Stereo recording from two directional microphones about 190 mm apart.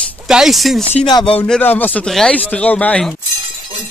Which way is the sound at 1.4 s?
10° left (ahead or behind).